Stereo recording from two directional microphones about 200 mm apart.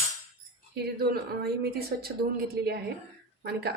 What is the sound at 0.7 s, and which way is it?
Speech, 50° right (ahead or behind).